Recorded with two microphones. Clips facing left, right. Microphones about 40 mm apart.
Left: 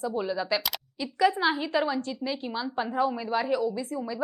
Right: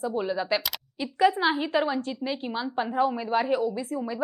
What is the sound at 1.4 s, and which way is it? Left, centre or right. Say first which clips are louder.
A woman's voice: right 1 dB; right.